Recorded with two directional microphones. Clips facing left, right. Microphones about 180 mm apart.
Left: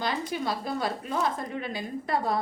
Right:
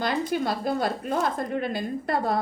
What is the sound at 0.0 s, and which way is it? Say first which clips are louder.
Speech: right 4 dB; 55° right (ahead or behind).